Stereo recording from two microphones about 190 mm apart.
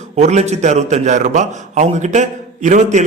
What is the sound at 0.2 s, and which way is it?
A man's voice, 35° right (ahead or behind).